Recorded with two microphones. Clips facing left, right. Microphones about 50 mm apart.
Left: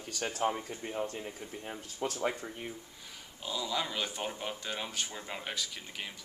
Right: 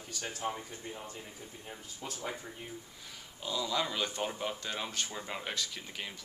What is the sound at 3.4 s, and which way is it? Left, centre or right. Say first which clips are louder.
Speech: right 1 dB; centre.